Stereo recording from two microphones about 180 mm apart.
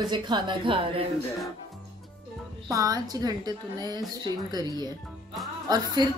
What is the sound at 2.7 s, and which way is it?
A woman's voice, 20° right (ahead or behind).